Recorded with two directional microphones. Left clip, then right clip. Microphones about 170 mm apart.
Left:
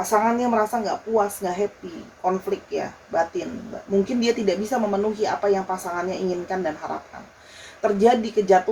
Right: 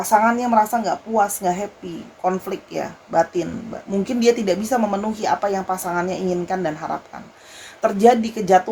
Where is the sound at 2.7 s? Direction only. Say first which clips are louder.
Right 7 dB; 70° right (ahead or behind).